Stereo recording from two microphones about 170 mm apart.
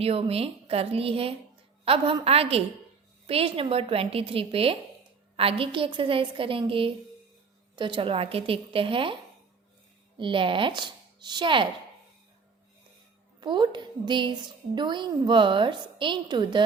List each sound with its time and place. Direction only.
0.0 s a woman's voice: 35° right (ahead or behind)
10.2 s speech: 30° right (ahead or behind)
13.4 s a woman's voice: 25° right (ahead or behind)